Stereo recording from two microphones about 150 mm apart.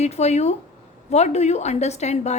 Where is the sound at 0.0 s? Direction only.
45° left (ahead or behind).